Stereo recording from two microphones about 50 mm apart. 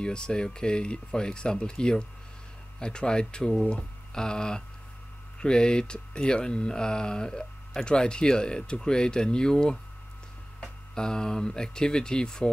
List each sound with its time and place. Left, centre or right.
0.0 s speech: centre
11.0 s speech: centre